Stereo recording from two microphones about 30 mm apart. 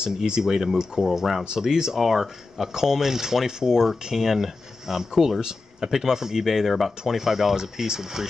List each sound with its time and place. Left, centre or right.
0.0 s speech: right
2.0 s speech: centre